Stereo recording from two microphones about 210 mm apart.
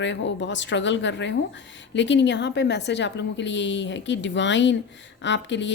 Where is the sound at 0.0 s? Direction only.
60° left (ahead or behind).